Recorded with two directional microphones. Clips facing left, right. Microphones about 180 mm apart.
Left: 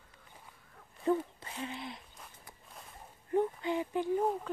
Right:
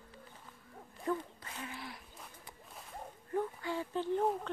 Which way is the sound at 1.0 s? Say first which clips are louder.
Left 6 dB; 25° left (ahead or behind).